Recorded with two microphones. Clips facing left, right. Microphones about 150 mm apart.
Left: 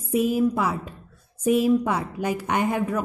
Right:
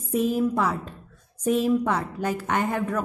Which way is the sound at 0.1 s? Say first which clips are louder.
Left 2 dB; 10° left (ahead or behind).